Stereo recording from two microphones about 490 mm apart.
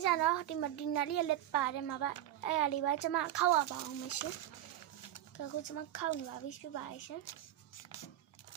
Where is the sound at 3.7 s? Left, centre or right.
Left.